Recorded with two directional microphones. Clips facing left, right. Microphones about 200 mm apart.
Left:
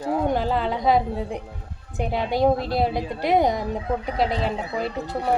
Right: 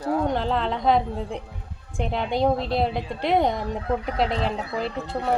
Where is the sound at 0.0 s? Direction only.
15° left (ahead or behind).